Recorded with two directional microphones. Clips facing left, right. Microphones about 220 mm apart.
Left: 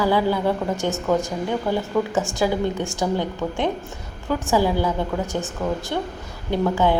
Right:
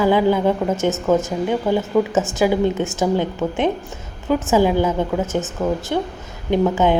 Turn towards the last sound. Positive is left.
turn(degrees=-20)  # may be behind; listen again after turning